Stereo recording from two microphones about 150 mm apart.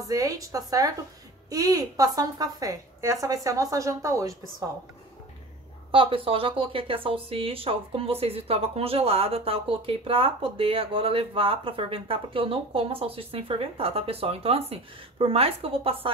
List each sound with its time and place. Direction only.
0.1 s a woman's voice: 25° right (ahead or behind)
5.9 s a woman's voice: 35° right (ahead or behind)